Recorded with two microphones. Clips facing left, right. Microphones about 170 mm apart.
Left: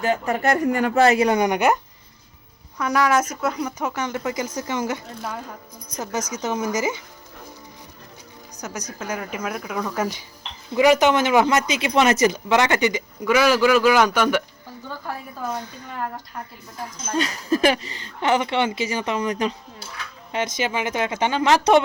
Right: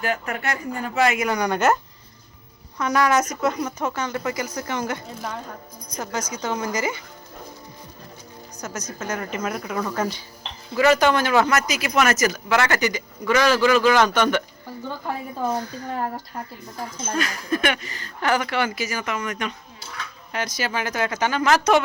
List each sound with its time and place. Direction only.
0.0 s speech: 30° left (ahead or behind)
0.6 s speech: 80° left
0.9 s speech: 30° left (ahead or behind); by 7.0 s 15° left (ahead or behind)
8.6 s speech: 15° left (ahead or behind)
10.0 s speech: 15° left (ahead or behind)
13.2 s speech: 10° left (ahead or behind)
14.8 s a woman's voice: 25° right (ahead or behind)
17.2 s speech: 30° left (ahead or behind)